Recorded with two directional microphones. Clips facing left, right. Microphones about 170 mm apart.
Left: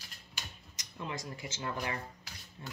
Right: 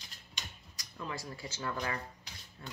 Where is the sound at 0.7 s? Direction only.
20° left (ahead or behind).